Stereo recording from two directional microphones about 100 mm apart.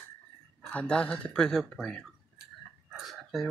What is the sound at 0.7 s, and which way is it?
Speech, 10° left (ahead or behind).